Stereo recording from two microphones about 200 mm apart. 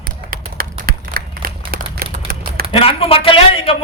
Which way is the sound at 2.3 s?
45° right (ahead or behind).